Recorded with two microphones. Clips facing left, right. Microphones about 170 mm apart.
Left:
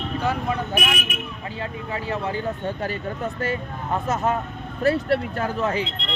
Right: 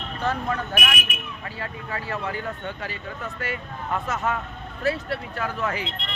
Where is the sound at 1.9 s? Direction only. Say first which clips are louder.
Left 3 dB; 20° left (ahead or behind).